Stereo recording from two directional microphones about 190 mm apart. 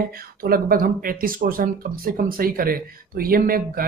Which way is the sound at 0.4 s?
50° right (ahead or behind).